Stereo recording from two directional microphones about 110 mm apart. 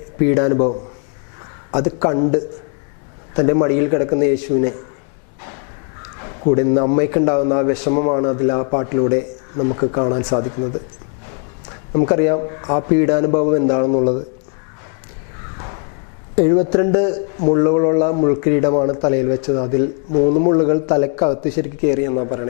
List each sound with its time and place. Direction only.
0.3 s a man's voice: 15° left (ahead or behind)
1.7 s a man's voice: 15° left (ahead or behind)
6.4 s a man's voice: 15° left (ahead or behind)
11.9 s a man's voice: 15° left (ahead or behind)
16.3 s a man's voice: 15° left (ahead or behind)